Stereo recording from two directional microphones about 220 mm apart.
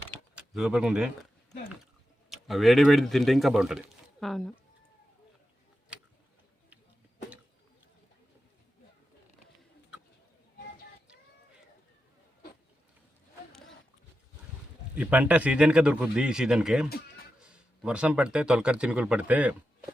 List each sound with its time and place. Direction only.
0.3 s speech: 5° right (ahead or behind)
2.3 s speech: centre (ahead or behind)
14.9 s speech: 5° right (ahead or behind)